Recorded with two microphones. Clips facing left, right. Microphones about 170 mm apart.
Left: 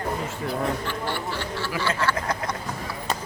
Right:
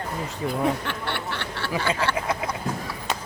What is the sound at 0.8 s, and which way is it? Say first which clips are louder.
Snicker: left 1 dB; 65° right (ahead or behind).